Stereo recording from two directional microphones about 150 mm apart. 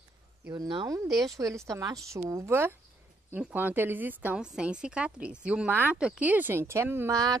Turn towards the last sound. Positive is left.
turn(degrees=-25)  # may be behind; listen again after turning